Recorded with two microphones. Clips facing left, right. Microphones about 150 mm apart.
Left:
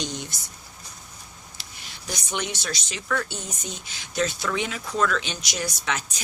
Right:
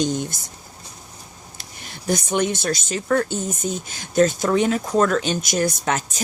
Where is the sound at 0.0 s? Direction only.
45° right (ahead or behind).